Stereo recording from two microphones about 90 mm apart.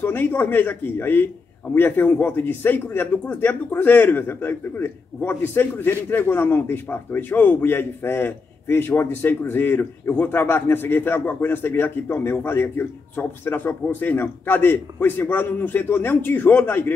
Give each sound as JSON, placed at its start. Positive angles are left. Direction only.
{"t": 0.0, "sound": "speech", "side_deg": 20}